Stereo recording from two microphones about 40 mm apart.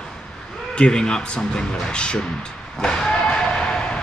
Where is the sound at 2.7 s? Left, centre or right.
Centre.